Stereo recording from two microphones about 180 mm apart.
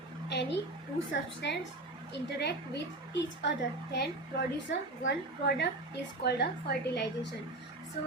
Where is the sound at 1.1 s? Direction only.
70° left (ahead or behind).